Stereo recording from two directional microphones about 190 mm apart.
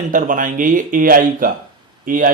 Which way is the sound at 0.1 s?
45° right (ahead or behind).